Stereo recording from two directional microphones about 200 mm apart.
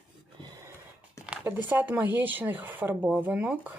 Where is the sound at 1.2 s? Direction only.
5° right (ahead or behind).